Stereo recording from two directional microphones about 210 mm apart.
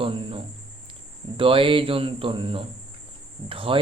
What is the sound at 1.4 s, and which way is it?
Speech, 25° right (ahead or behind).